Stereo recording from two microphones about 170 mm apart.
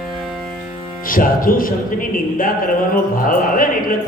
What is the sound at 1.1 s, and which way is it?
A man's voice, 55° left (ahead or behind).